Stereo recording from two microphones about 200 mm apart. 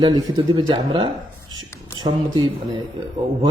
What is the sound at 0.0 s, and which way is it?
A man's voice, 20° right (ahead or behind).